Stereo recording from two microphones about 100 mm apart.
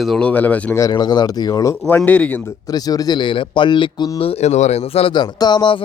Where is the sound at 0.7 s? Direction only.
40° left (ahead or behind).